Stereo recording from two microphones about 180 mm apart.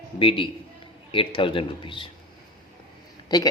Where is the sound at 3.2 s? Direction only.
20° left (ahead or behind).